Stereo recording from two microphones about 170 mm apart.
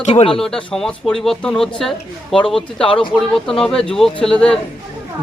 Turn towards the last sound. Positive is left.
turn(degrees=5)  # may be behind; listen again after turning